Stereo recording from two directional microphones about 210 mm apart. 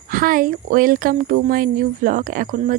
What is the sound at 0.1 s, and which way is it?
Speech, 40° right (ahead or behind).